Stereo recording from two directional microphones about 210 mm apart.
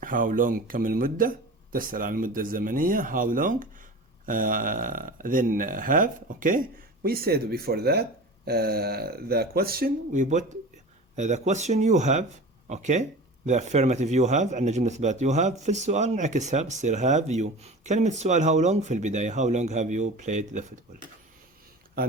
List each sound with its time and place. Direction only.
0.0 s speech: 40° right (ahead or behind)